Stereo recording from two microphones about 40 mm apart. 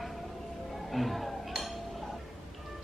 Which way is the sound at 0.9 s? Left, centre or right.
Centre.